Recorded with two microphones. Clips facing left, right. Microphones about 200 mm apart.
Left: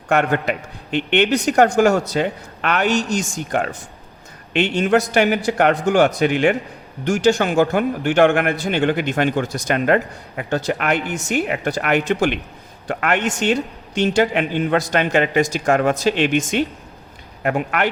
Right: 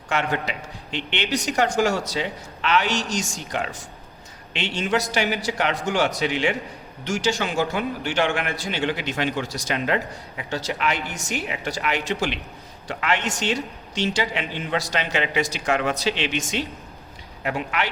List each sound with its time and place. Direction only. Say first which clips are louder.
0.1 s a man's voice: left 7 dB; 55° left (ahead or behind)
17.4 s speech: left 6 dB; 55° left (ahead or behind)